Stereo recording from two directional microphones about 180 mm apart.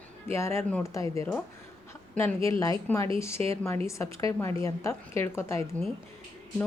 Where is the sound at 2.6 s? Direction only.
15° left (ahead or behind).